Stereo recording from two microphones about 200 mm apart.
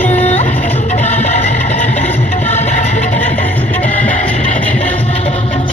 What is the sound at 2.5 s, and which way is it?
Music, 35° left (ahead or behind).